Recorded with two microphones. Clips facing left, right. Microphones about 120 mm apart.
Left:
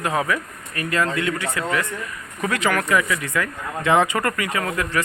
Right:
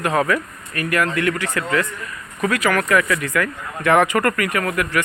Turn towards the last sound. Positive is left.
turn(degrees=25)  # may be behind; listen again after turning